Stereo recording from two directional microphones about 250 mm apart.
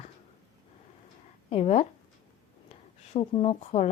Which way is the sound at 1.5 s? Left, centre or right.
Left.